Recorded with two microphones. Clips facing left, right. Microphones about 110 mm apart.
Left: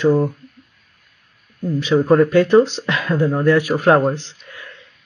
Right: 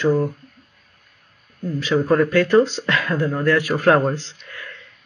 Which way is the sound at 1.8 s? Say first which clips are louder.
Left 4 dB; 20° left (ahead or behind).